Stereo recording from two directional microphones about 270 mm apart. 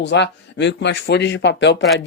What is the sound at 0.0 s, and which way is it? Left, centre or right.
Speech, left.